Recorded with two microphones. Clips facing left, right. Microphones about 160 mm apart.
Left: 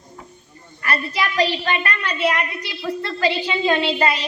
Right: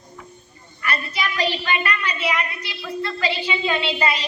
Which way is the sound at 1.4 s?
45° left (ahead or behind).